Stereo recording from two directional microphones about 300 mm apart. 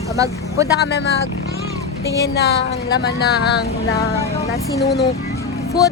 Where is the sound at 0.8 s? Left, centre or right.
Left.